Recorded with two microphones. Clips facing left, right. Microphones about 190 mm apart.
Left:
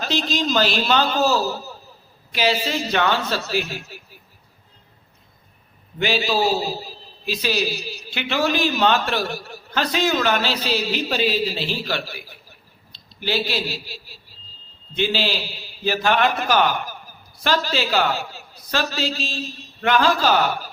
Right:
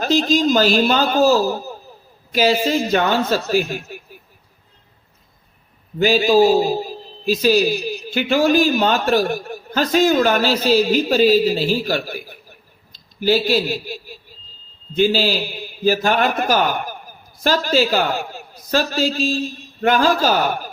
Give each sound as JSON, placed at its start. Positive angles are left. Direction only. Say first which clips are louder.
{"t": 0.0, "sound": "a man's voice", "louder": "right 7 dB", "side_deg": -45}
{"t": 6.0, "sound": "a man's voice", "louder": "right 8 dB", "side_deg": -45}